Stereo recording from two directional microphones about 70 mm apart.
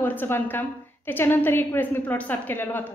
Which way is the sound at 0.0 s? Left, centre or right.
Left.